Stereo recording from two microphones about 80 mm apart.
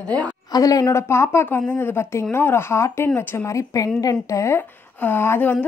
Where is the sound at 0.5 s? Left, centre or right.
Left.